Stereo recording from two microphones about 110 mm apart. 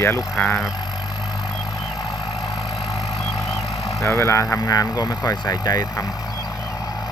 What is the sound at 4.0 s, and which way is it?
Speech, 25° left (ahead or behind).